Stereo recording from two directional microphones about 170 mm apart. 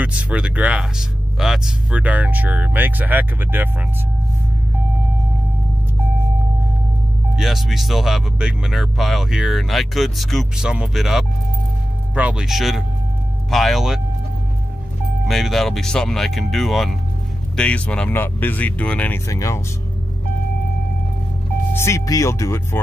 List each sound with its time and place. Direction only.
0.0 s speech: 5° right (ahead or behind)
7.3 s speech: centre (ahead or behind)
15.2 s speech: centre (ahead or behind); by 19.6 s 15° left (ahead or behind)
21.7 s speech: 15° left (ahead or behind)